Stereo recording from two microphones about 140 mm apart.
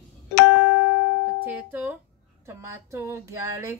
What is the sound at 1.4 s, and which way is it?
Speech, 10° right (ahead or behind).